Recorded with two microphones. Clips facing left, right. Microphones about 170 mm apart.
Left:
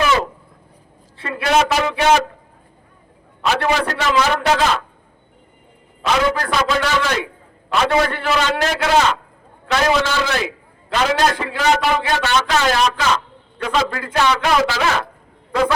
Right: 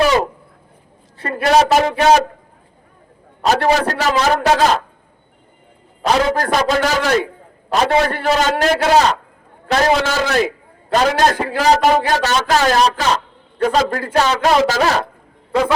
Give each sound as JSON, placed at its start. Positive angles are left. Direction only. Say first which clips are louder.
{"t": 1.2, "sound": "a man's voice", "louder": "right 3 dB", "side_deg": -45}
{"t": 3.4, "sound": "a man's voice", "louder": "right 4 dB", "side_deg": -40}
{"t": 6.0, "sound": "a man's voice", "louder": "right 2 dB", "side_deg": -40}